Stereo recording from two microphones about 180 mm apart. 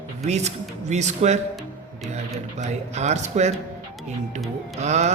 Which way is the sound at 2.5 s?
40° right (ahead or behind).